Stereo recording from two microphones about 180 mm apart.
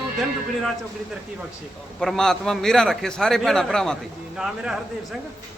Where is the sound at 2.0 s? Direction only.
Centre (ahead or behind).